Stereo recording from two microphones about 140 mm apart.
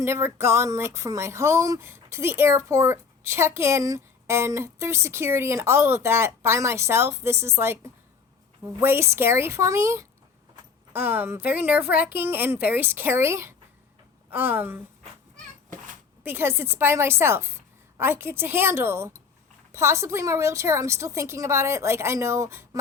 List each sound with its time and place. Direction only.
0.0 s speech: 20° right (ahead or behind)
8.8 s a woman's voice: 20° right (ahead or behind)
16.2 s a woman's voice: 15° right (ahead or behind)